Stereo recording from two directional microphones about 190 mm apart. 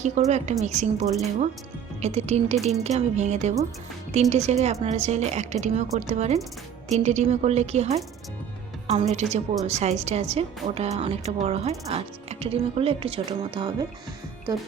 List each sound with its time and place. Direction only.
0.0 s a woman's voice: 35° right (ahead or behind)